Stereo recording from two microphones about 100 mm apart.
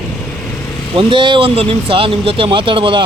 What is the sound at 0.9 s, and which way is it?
Speech, 55° right (ahead or behind).